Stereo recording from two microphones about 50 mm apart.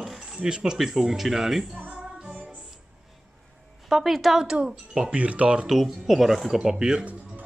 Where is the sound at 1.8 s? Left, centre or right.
Right.